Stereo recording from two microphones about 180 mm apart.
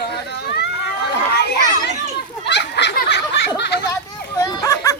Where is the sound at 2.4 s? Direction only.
70° left (ahead or behind).